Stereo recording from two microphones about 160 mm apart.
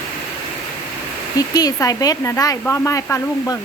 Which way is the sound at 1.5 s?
25° left (ahead or behind).